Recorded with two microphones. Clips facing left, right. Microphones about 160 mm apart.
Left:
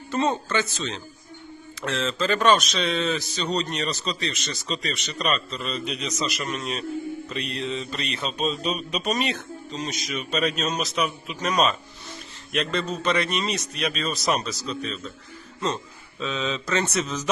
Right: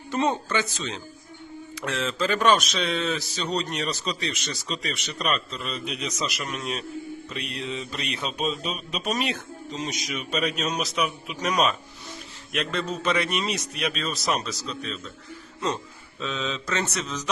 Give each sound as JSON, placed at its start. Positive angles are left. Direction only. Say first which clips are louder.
{"t": 0.1, "sound": "speech", "louder": "left 1 dB", "side_deg": -15}
{"t": 9.7, "sound": "a man's voice", "louder": "left 1 dB", "side_deg": -15}
{"t": 16.2, "sound": "a man's voice", "louder": "left 2 dB", "side_deg": 0}